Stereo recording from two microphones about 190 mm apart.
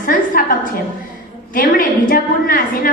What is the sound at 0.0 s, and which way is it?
Speech, 45° left (ahead or behind).